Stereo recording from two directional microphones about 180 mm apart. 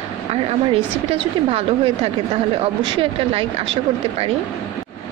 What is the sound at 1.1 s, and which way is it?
Speech, 35° right (ahead or behind).